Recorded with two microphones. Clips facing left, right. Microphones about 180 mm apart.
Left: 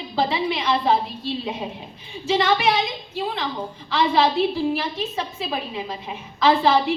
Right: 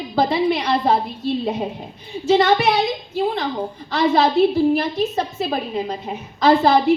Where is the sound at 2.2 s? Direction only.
40° right (ahead or behind).